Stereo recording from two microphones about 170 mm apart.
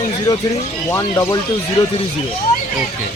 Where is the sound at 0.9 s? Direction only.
15° left (ahead or behind).